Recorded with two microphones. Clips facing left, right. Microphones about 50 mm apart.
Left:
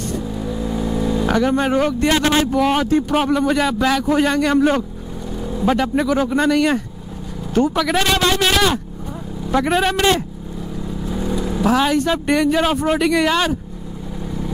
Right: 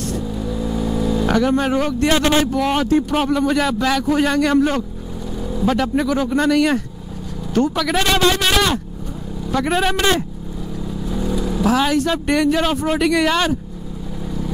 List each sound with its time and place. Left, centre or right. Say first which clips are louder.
0.2 s speech: even; centre